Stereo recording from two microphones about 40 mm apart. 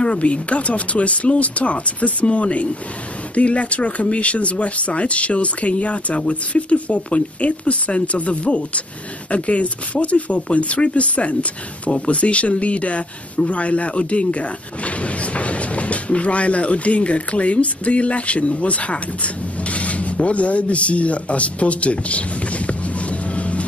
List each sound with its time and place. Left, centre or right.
0.0 s speech: left